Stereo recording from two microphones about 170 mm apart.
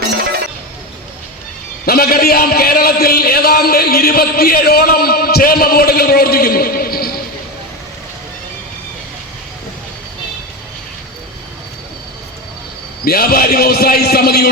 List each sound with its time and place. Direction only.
1.8 s a man's voice: 60° left (ahead or behind)
13.1 s a man's voice: 60° left (ahead or behind)